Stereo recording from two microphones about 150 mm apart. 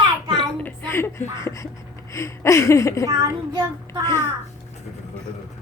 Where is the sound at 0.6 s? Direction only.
15° left (ahead or behind).